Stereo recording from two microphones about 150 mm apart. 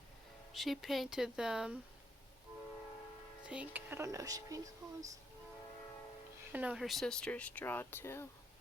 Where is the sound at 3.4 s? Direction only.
5° right (ahead or behind); by 4.6 s 25° right (ahead or behind).